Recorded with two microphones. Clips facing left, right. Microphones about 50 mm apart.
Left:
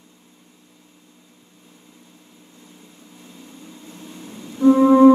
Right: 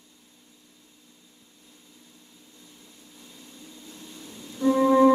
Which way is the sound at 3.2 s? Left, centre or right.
Left.